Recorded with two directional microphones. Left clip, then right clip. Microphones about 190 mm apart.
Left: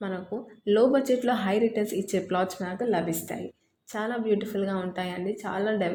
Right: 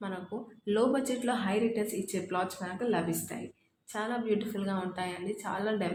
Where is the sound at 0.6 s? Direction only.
25° left (ahead or behind).